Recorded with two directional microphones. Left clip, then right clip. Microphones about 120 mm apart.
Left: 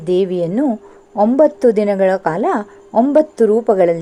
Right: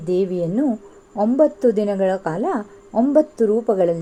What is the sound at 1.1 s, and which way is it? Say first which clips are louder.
A woman's voice: left 5 dB; 25° left (ahead or behind).